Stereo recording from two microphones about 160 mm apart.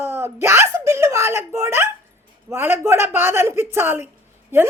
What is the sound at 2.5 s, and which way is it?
Speech, 15° right (ahead or behind).